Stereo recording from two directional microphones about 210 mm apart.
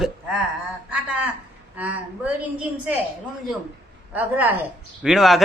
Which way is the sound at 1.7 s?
5° right (ahead or behind).